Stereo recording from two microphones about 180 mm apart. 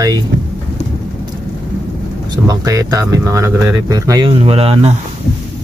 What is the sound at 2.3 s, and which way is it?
Speech, 20° right (ahead or behind).